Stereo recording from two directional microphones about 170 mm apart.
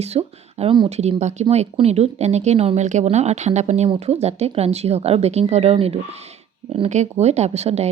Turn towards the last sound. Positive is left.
turn(degrees=-40)  # may be behind; listen again after turning